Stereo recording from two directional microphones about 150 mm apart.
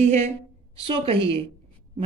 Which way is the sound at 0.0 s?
50° right (ahead or behind).